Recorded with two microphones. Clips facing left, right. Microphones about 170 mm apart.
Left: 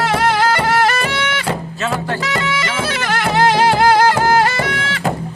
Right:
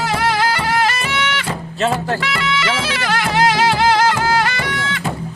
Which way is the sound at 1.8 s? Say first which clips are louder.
Right 6 dB; 40° right (ahead or behind).